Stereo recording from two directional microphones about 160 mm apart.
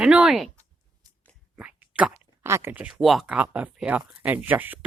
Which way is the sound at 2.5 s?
15° right (ahead or behind).